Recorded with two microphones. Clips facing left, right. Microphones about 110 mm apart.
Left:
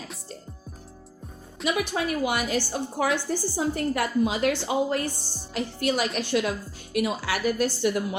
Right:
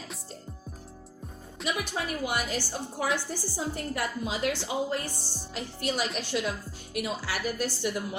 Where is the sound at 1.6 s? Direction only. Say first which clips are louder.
Left 6 dB; 90° left.